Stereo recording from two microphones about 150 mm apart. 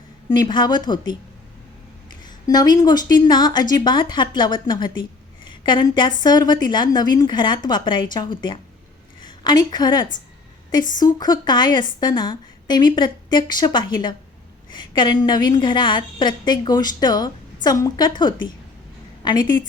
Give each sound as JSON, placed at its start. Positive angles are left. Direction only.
{"t": 0.3, "sound": "a woman's voice", "side_deg": 30}
{"t": 2.2, "sound": "a woman's voice", "side_deg": 25}